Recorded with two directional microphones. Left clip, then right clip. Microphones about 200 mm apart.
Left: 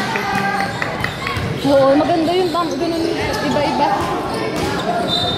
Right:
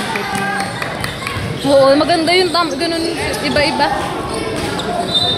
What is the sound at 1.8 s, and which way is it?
Speech, 25° right (ahead or behind).